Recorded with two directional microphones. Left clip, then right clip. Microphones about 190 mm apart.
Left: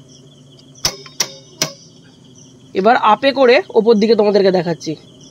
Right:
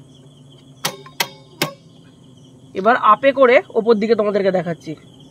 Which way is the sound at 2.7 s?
50° left (ahead or behind).